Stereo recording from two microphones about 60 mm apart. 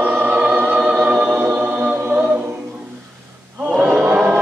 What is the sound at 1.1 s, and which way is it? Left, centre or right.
Music, right.